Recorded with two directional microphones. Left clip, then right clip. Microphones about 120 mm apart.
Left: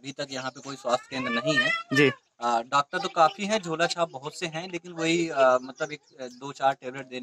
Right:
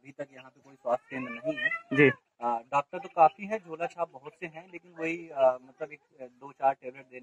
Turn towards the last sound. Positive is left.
turn(degrees=25)  # may be behind; listen again after turning